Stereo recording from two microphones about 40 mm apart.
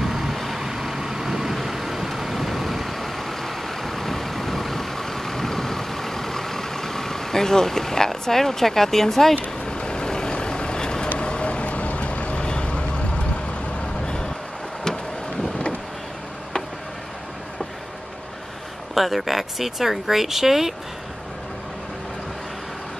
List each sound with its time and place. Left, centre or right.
0.0 s vehicle: centre
9.7 s vehicle: left
18.9 s speech: centre